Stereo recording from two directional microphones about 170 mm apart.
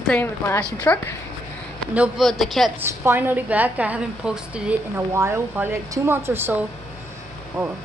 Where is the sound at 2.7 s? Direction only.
15° right (ahead or behind).